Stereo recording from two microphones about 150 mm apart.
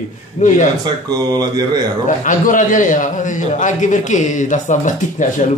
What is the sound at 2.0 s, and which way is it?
Speech, 60° left (ahead or behind).